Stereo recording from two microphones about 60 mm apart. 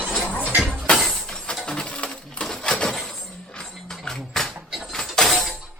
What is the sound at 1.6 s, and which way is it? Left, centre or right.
Sewing machine, centre.